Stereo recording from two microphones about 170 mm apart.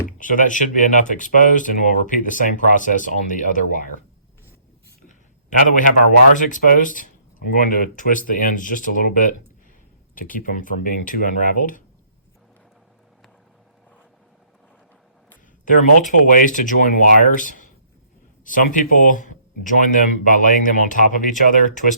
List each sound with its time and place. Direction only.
0.2 s speech: 50° left (ahead or behind)
5.0 s a sound: 50° left (ahead or behind)
6.3 s speech: 50° left (ahead or behind)
15.6 s speech: 50° left (ahead or behind)